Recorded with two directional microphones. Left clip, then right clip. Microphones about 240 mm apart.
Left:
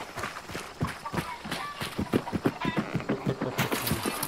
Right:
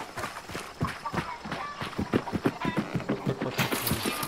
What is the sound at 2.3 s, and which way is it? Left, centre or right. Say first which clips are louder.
Clip-clop: even; centre.